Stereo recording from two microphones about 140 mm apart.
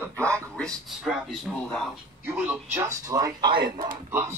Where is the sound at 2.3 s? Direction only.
10° right (ahead or behind).